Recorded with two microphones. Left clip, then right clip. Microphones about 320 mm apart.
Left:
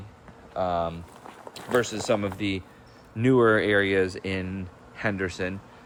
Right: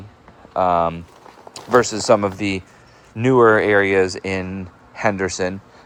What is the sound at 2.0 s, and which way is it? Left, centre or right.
Speech, centre.